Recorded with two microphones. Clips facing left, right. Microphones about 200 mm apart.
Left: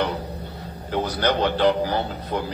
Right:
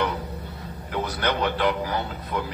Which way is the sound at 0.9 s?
30° left (ahead or behind).